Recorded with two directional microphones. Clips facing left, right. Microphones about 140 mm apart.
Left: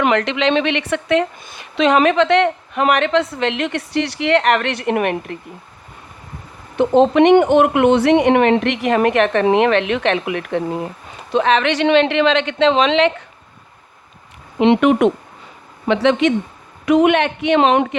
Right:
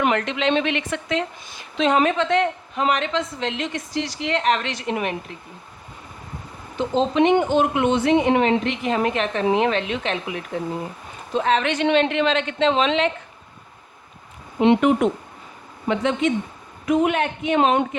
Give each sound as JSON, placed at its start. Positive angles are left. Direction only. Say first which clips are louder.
{"t": 0.0, "sound": "a woman's voice", "louder": "left 4 dB", "side_deg": 90}
{"t": 6.7, "sound": "a woman's voice", "louder": "left 7 dB", "side_deg": 60}
{"t": 11.3, "sound": "speech", "louder": "left 5 dB", "side_deg": 80}
{"t": 14.6, "sound": "a man's voice", "louder": "left 4 dB", "side_deg": 85}